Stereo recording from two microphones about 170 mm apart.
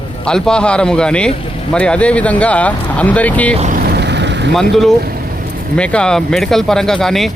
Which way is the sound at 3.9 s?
90° right.